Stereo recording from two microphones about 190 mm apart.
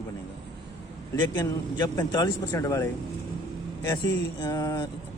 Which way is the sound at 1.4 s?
20° left (ahead or behind).